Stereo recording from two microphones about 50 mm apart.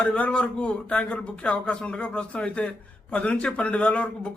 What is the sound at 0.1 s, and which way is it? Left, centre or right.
A man's voice, left.